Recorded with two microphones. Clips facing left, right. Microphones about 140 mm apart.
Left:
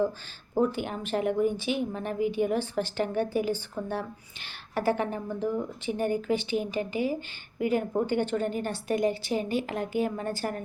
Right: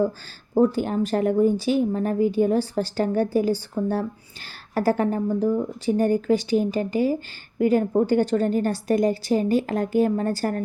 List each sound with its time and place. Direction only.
0.6 s a woman's voice: 40° right (ahead or behind)
4.7 s a woman's voice: 40° right (ahead or behind)